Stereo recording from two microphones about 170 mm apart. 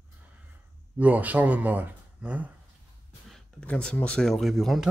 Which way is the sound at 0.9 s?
10° right (ahead or behind).